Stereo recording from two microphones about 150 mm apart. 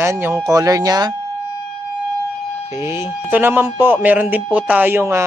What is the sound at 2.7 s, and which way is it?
Speech, 15° right (ahead or behind).